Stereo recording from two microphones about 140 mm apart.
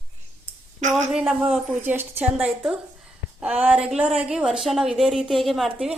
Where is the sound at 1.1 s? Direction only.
5° right (ahead or behind).